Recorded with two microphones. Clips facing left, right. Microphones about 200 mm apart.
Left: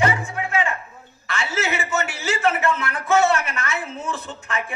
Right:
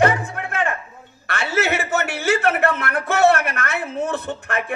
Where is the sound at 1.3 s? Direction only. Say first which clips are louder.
Right 4 dB; 60° right (ahead or behind).